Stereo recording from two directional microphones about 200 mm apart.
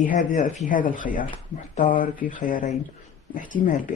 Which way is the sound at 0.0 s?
40° left (ahead or behind).